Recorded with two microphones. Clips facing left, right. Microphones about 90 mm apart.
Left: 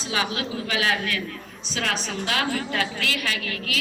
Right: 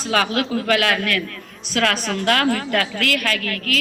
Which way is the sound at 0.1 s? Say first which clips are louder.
Right 7 dB; 55° right (ahead or behind).